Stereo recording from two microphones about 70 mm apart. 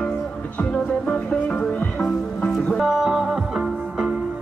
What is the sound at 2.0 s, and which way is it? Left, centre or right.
Music, centre.